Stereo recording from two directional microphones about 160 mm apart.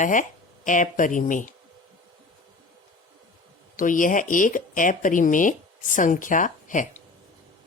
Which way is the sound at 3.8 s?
55° left (ahead or behind).